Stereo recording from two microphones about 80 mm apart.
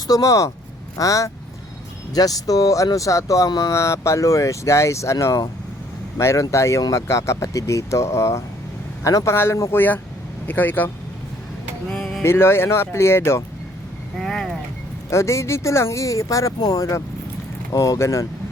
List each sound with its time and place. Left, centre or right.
0.1 s speech: left
9.3 s speech: left
10.4 s speech: left
11.9 s a sound: centre
12.2 s speech: left
14.2 s a sound: centre
15.1 s speech: left